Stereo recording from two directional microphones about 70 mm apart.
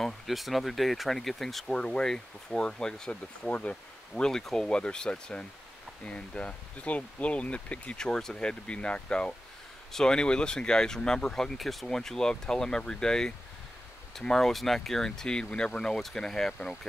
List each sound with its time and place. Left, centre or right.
0.0 s speech: centre